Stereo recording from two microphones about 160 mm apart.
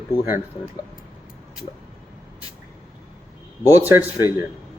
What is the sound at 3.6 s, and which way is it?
Speech, 10° right (ahead or behind).